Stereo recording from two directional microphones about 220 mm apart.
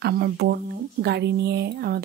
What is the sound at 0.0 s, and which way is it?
Speech, 50° right (ahead or behind).